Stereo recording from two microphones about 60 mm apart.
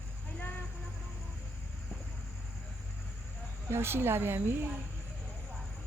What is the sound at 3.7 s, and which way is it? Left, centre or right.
A woman's voice, right.